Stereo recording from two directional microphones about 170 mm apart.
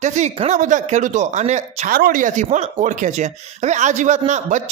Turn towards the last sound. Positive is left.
turn(degrees=-45)  # may be behind; listen again after turning